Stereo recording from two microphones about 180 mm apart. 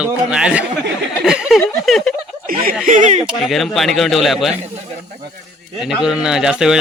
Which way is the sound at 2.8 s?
45° right (ahead or behind).